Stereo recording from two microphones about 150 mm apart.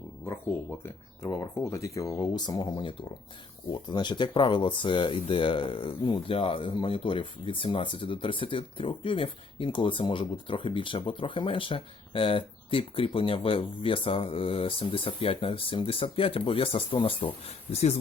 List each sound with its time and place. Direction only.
1.2 s speech: 20° left (ahead or behind); by 17.9 s 45° left (ahead or behind)